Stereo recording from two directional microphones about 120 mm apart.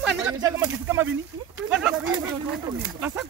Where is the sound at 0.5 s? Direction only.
20° right (ahead or behind).